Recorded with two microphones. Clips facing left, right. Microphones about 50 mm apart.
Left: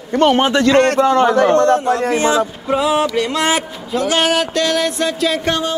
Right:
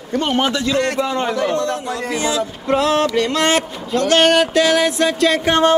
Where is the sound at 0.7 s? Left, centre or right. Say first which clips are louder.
Left 7 dB; left.